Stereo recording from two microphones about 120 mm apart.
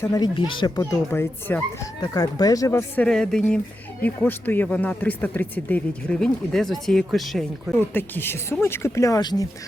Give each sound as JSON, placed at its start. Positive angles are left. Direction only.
{"t": 0.0, "sound": "speech", "side_deg": 30}
{"t": 0.3, "sound": "speech", "side_deg": 45}
{"t": 0.8, "sound": "speech", "side_deg": 25}
{"t": 2.0, "sound": "speech", "side_deg": 30}
{"t": 3.0, "sound": "speech", "side_deg": 5}
{"t": 7.7, "sound": "speech", "side_deg": 15}